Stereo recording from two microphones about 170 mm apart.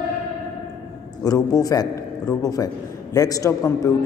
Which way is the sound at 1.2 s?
20° left (ahead or behind).